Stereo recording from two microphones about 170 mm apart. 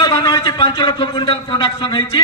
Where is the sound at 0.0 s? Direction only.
25° left (ahead or behind).